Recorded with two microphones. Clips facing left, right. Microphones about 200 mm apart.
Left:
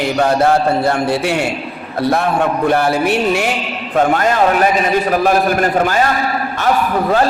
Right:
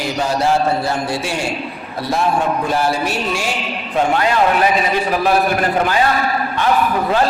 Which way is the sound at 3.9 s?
45° left (ahead or behind).